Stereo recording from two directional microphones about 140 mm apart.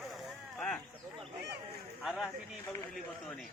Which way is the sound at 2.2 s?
15° left (ahead or behind).